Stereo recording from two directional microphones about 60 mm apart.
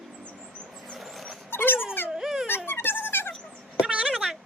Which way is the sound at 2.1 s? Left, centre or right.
Centre.